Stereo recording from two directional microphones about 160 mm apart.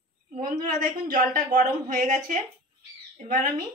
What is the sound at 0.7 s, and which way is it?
A woman's voice, 60° right (ahead or behind).